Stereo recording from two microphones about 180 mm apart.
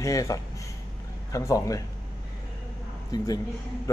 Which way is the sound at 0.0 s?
20° left (ahead or behind).